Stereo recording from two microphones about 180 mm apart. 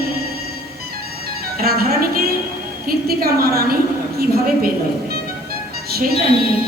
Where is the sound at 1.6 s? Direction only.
55° right (ahead or behind).